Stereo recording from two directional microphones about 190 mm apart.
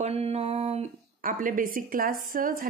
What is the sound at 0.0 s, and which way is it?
Speech, 30° right (ahead or behind).